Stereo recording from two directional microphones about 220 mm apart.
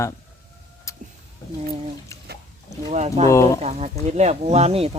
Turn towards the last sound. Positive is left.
turn(degrees=-30)  # may be behind; listen again after turning